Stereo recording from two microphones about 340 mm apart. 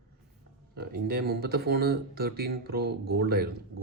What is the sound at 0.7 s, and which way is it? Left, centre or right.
Speech, right.